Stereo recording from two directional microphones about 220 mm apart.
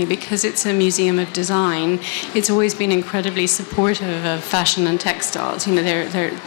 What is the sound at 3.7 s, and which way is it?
Speech, 15° left (ahead or behind).